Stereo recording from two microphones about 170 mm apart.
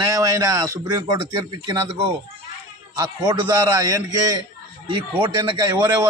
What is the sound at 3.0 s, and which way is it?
A man's voice, 25° right (ahead or behind).